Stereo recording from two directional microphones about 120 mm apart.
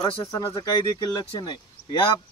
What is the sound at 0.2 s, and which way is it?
Speech, 25° left (ahead or behind).